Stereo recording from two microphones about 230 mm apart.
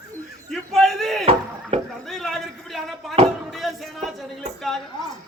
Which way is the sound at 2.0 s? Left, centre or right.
Centre.